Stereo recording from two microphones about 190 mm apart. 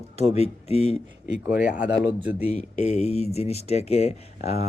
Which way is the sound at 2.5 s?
35° left (ahead or behind).